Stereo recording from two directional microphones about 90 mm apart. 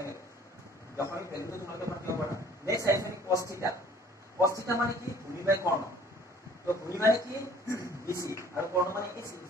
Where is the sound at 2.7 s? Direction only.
35° right (ahead or behind).